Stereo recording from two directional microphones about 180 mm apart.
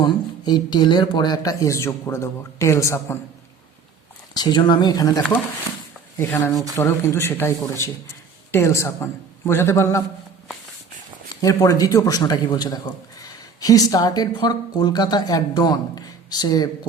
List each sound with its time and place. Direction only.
0.0 s a man's voice: 25° left (ahead or behind)
4.4 s a man's voice: 25° left (ahead or behind)
11.4 s a man's voice: 20° left (ahead or behind)